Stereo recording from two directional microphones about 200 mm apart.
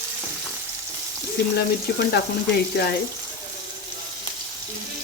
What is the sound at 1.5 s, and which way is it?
Speech, 50° left (ahead or behind).